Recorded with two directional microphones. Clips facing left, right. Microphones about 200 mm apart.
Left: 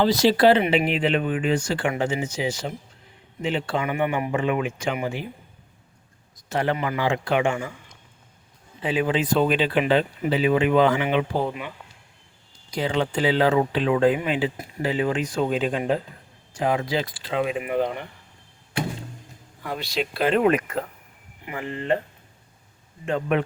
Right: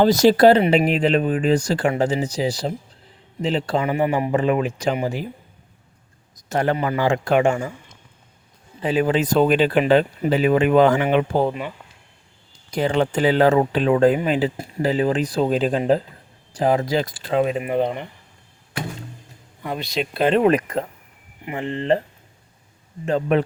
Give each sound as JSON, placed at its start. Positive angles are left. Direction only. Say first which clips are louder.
{"t": 0.0, "sound": "speech", "louder": "right 4 dB", "side_deg": -45}
{"t": 6.5, "sound": "speech", "louder": "right 3 dB", "side_deg": -45}
{"t": 8.8, "sound": "speech", "louder": "right 4 dB", "side_deg": -40}
{"t": 12.7, "sound": "speech", "louder": "right 4 dB", "side_deg": -50}
{"t": 19.6, "sound": "speech", "louder": "right 2 dB", "side_deg": -20}
{"t": 23.0, "sound": "speech", "louder": "right 4 dB", "side_deg": -35}